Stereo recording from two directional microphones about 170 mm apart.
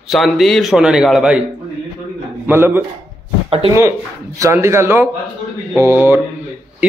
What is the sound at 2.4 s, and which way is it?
Speech, 10° right (ahead or behind).